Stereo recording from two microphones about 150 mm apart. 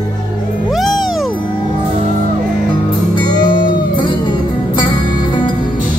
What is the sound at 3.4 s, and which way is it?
Music, 30° left (ahead or behind).